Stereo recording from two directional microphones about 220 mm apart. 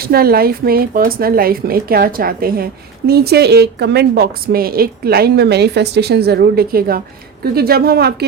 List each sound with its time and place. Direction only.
0.0 s a woman's voice: 45° right (ahead or behind)